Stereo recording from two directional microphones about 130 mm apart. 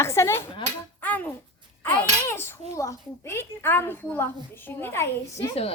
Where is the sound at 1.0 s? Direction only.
10° left (ahead or behind).